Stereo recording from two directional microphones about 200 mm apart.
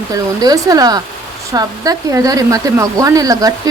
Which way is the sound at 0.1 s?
15° right (ahead or behind).